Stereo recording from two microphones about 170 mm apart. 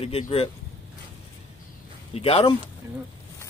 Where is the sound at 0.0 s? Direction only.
35° left (ahead or behind).